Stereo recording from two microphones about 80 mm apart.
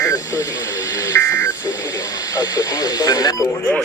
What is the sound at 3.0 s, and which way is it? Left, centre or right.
Speech, left.